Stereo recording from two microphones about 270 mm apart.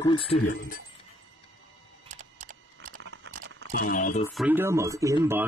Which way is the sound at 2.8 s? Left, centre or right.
Right.